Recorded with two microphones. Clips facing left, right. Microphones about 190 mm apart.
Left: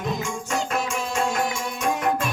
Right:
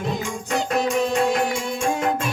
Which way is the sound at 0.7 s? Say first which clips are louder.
Right 6 dB; 35° right (ahead or behind).